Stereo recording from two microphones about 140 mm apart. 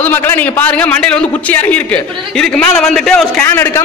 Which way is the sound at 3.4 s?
15° left (ahead or behind).